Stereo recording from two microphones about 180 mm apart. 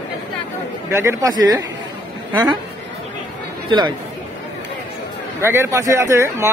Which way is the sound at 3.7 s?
25° right (ahead or behind).